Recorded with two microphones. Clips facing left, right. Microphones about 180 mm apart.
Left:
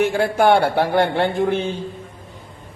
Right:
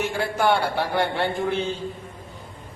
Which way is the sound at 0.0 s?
55° left (ahead or behind).